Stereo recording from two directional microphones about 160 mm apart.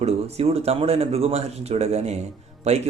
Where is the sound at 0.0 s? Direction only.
40° right (ahead or behind).